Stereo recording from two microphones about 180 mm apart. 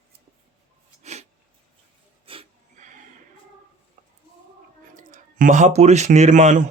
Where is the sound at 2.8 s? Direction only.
45° right (ahead or behind).